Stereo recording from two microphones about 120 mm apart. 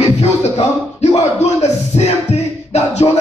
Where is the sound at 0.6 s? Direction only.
60° left (ahead or behind).